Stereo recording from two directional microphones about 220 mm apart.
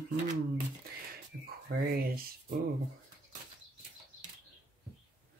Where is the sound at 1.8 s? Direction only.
40° right (ahead or behind).